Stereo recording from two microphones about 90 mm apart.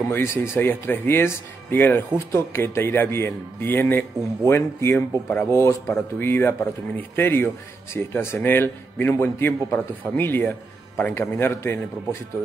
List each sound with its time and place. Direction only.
0.1 s speech: 30° left (ahead or behind)